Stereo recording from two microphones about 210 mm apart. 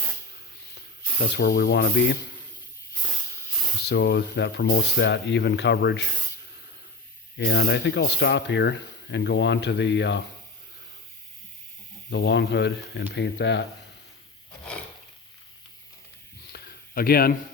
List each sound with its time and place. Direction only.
1.2 s speech: 50° left (ahead or behind)
3.1 s hiss: centre (ahead or behind)
3.8 s speech: 55° left (ahead or behind)
7.3 s speech: 55° left (ahead or behind)
12.1 s speech: 55° left (ahead or behind)
16.5 s a sound: 45° left (ahead or behind)